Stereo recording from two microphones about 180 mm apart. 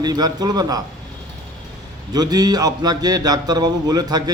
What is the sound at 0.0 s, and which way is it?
Speech, 20° right (ahead or behind).